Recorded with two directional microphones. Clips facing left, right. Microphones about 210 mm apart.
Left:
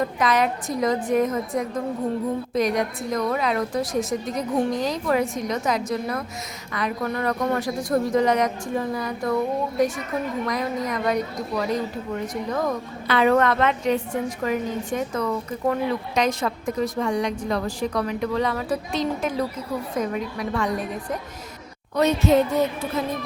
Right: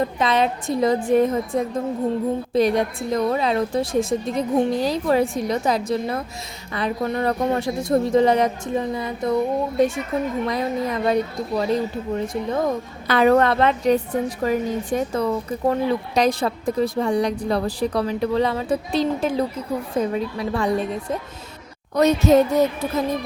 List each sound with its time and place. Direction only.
0.0 s a woman's voice: 25° right (ahead or behind)
13.1 s a woman's voice: 40° right (ahead or behind)
21.9 s a woman's voice: 40° right (ahead or behind)